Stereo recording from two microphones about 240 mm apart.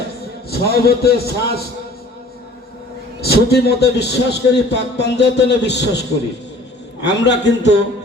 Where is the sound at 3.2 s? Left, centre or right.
Left.